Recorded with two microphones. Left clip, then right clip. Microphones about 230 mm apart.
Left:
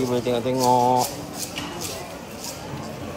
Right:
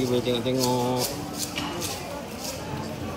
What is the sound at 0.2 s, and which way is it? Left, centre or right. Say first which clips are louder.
Mantra: left 3 dB; centre.